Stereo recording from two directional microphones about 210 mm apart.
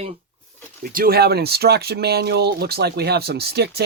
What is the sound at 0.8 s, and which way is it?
Speech, 45° right (ahead or behind).